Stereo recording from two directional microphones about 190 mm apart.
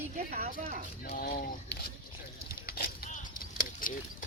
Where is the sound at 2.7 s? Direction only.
50° left (ahead or behind).